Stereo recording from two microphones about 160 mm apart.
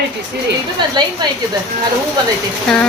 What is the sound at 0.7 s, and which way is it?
Speech, 30° right (ahead or behind).